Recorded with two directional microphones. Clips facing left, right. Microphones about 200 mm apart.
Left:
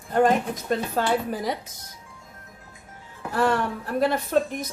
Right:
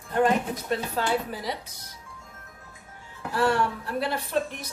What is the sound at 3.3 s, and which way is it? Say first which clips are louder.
A woman's voice: left 1 dB; 50° left (ahead or behind).